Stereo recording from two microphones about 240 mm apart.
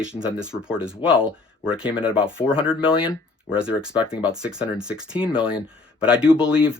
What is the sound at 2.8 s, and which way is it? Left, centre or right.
Speech, left.